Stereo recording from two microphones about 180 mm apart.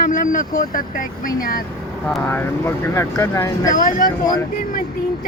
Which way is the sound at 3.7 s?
50° left (ahead or behind).